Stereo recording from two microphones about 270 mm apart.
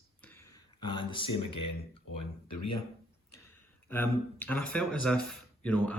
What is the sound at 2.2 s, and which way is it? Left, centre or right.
Speech, left.